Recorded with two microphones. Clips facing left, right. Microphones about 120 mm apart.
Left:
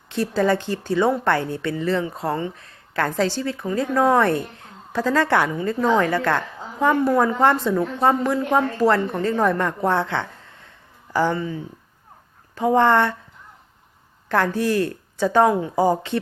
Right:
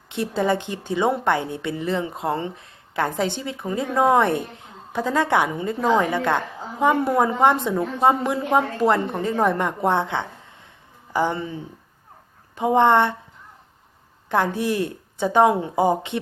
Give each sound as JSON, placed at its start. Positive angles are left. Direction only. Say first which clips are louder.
{"t": 0.1, "sound": "a woman's voice", "louder": "left 2 dB", "side_deg": -20}
{"t": 14.3, "sound": "a woman's voice", "louder": "left 1 dB", "side_deg": -15}